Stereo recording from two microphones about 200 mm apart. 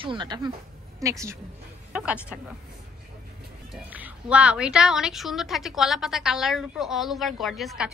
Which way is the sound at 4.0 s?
5° right (ahead or behind).